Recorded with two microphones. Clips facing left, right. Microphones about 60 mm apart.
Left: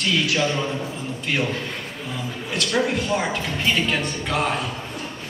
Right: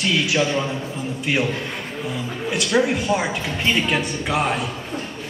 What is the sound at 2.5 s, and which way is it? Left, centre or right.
A man's voice, centre.